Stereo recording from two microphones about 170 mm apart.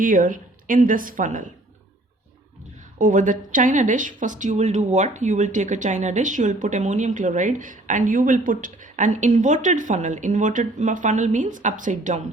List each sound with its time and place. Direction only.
0.0 s a woman's voice: 55° right (ahead or behind)
3.0 s a woman's voice: 50° right (ahead or behind)